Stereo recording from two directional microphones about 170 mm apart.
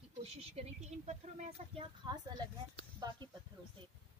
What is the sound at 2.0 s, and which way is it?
Speech, 25° right (ahead or behind).